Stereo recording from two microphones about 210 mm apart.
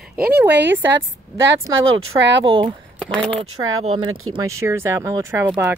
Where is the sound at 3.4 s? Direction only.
75° right (ahead or behind).